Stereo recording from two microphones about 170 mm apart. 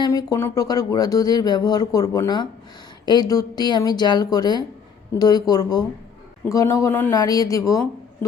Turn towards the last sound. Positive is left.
turn(degrees=20)  # may be behind; listen again after turning